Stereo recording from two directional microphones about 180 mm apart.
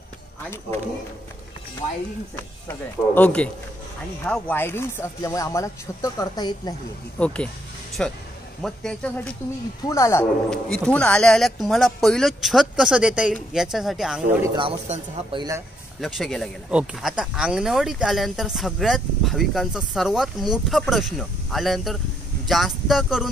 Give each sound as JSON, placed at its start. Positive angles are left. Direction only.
{"t": 2.7, "sound": "speech", "side_deg": 10}
{"t": 7.2, "sound": "speech", "side_deg": 5}
{"t": 10.5, "sound": "speech", "side_deg": 5}
{"t": 14.4, "sound": "speech", "side_deg": -25}
{"t": 14.9, "sound": "speech", "side_deg": -40}
{"t": 15.3, "sound": "speech", "side_deg": -20}
{"t": 16.0, "sound": "speech", "side_deg": 0}